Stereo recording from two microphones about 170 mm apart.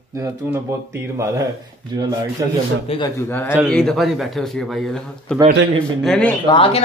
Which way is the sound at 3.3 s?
10° left (ahead or behind).